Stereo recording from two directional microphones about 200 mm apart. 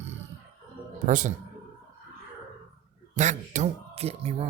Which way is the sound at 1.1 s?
40° right (ahead or behind).